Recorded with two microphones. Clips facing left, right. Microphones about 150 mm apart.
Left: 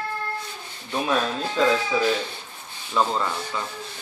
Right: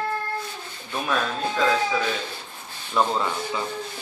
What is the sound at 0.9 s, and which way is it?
Speech, 20° left (ahead or behind).